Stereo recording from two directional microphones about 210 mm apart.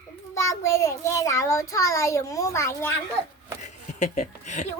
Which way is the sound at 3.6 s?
35° left (ahead or behind).